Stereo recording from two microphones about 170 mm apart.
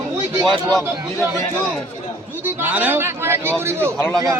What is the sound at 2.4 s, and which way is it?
A man's voice, 10° right (ahead or behind).